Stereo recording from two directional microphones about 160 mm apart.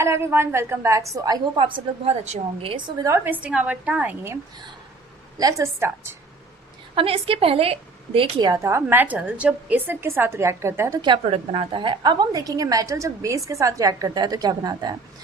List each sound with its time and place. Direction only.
0.0 s a woman's voice: 15° right (ahead or behind)
2.0 s a woman's voice: 40° right (ahead or behind)
3.1 s a woman's voice: 10° right (ahead or behind)
5.4 s a woman's voice: 20° right (ahead or behind)
6.9 s a woman's voice: 35° right (ahead or behind); by 11.0 s 15° right (ahead or behind)
11.3 s a woman's voice: 35° right (ahead or behind)